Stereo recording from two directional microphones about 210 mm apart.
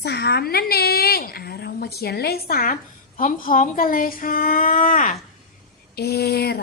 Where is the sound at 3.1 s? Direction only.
40° left (ahead or behind).